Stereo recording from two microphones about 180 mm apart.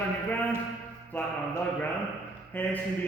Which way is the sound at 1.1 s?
10° left (ahead or behind).